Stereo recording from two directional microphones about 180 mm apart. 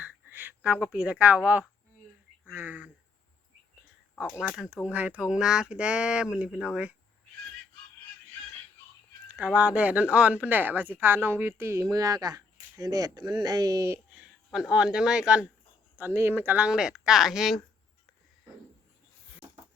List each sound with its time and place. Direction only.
0.0 s a woman's voice: 10° right (ahead or behind)
4.4 s speech: centre (ahead or behind)
9.3 s a woman's voice: 5° right (ahead or behind)
14.5 s speech: 5° right (ahead or behind)